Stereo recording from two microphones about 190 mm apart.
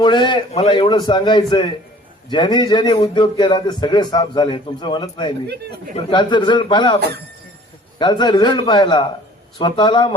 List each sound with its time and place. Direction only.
0.0 s speech: 25° left (ahead or behind)